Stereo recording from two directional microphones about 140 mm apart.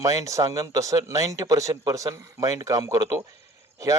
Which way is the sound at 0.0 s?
25° right (ahead or behind).